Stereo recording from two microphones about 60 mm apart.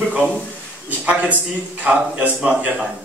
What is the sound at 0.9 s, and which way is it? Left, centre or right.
A man's voice, right.